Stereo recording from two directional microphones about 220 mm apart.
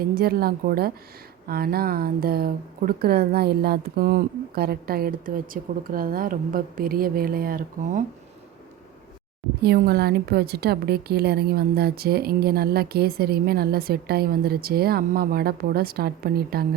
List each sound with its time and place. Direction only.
0.0 s a woman's voice: 45° right (ahead or behind)
9.6 s a woman's voice: 45° right (ahead or behind)